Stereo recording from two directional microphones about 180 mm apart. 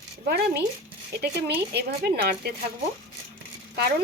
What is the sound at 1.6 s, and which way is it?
Speech, 65° right (ahead or behind).